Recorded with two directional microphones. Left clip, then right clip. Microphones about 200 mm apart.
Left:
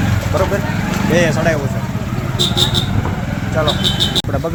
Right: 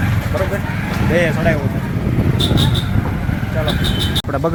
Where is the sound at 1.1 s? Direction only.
5° right (ahead or behind).